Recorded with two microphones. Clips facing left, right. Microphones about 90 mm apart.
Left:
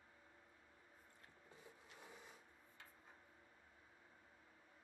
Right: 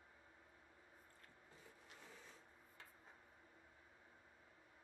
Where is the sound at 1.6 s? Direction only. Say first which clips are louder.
Left 1 dB; 15° left (ahead or behind).